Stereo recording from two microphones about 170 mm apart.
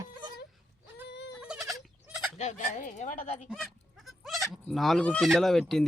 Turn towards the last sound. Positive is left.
turn(degrees=0)  # may be behind; listen again after turning